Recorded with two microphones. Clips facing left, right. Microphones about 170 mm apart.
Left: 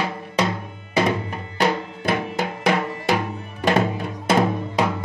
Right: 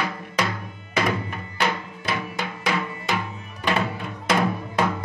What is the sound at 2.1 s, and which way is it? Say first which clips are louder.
Music: left 5 dB; 50° left (ahead or behind).